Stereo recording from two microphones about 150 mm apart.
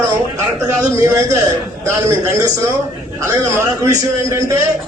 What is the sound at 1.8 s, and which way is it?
A man's voice, 20° right (ahead or behind).